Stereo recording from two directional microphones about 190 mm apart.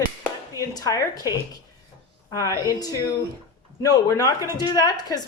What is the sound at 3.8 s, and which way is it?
Speech, 20° left (ahead or behind).